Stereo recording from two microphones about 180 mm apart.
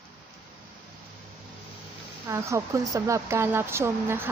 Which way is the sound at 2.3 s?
15° right (ahead or behind).